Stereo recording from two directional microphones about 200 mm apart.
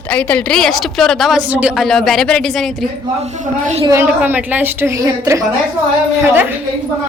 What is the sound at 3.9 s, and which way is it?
A woman's voice, 10° right (ahead or behind).